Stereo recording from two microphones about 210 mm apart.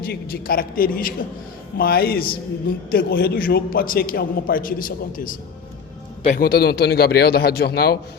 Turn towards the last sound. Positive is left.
turn(degrees=50)  # may be behind; listen again after turning